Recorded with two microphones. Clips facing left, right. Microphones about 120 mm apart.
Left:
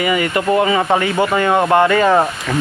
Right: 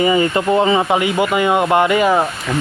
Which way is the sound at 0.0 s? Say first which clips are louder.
Right 2 dB; 25° right (ahead or behind).